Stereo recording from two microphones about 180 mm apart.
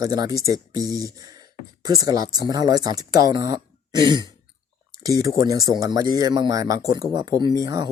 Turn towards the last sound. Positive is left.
turn(degrees=-20)  # may be behind; listen again after turning